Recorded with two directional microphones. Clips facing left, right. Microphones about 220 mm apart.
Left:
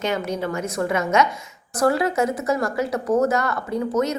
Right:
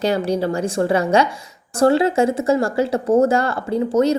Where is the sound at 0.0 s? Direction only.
35° right (ahead or behind).